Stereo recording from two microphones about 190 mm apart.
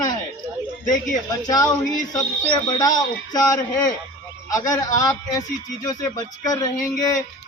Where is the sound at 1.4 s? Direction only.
20° left (ahead or behind).